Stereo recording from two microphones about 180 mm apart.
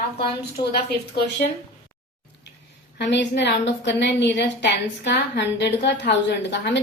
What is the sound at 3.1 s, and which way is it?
A woman's voice, 70° left (ahead or behind).